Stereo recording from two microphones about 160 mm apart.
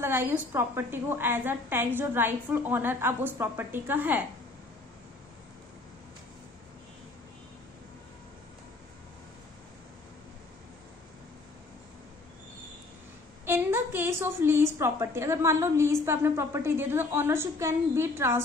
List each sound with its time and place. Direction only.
0.0 s a woman's voice: 15° right (ahead or behind)
13.5 s a woman's voice: 15° right (ahead or behind)